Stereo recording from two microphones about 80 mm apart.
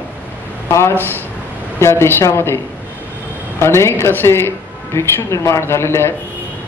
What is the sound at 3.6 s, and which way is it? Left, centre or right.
Speech, left.